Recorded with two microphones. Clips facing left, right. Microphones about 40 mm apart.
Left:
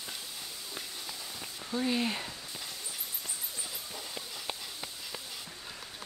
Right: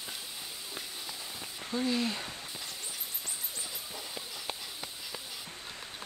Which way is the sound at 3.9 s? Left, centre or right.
Centre.